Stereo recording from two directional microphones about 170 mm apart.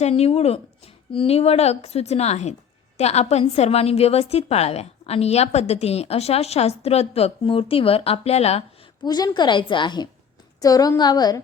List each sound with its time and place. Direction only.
0.0 s a woman's voice: 35° left (ahead or behind)
9.0 s a woman's voice: 25° left (ahead or behind)